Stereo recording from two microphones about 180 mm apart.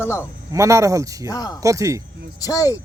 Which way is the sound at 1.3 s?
20° left (ahead or behind).